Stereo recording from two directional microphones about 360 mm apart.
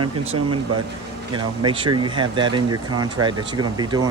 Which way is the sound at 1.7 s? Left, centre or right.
Centre.